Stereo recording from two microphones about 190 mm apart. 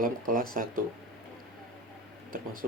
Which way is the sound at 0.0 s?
45° right (ahead or behind).